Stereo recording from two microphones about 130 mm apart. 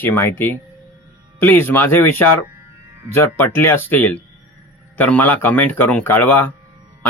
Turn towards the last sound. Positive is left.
turn(degrees=15)  # may be behind; listen again after turning